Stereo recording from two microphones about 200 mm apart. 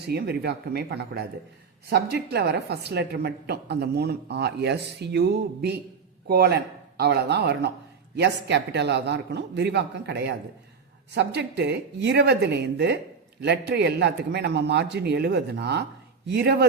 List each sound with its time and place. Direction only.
0.0 s a woman's voice: 55° right (ahead or behind)